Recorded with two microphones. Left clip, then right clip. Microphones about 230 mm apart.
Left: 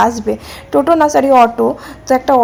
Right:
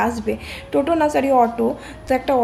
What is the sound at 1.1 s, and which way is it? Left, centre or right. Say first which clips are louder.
Speech: left 7 dB; left.